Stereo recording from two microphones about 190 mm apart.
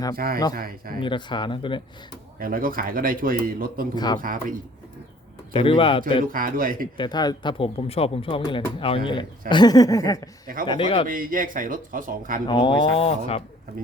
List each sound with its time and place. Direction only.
0.5 s speech: 50° right (ahead or behind)
0.9 s speech: 25° left (ahead or behind)
2.4 s speech: 50° right (ahead or behind)
3.9 s speech: 20° left (ahead or behind)
4.2 s speech: 45° right (ahead or behind)
5.5 s speech: 25° left (ahead or behind)
6.2 s speech: 45° right (ahead or behind)
6.9 s speech: 25° left (ahead or behind)
10.7 s speech: 30° left (ahead or behind)
11.0 s speech: 45° right (ahead or behind)
12.5 s speech: 25° left (ahead or behind)